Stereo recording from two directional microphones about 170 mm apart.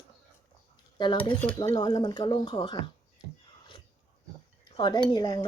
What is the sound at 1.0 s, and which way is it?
Speech, 25° left (ahead or behind).